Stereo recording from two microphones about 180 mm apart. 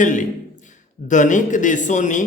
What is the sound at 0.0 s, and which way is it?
Speech, 45° left (ahead or behind).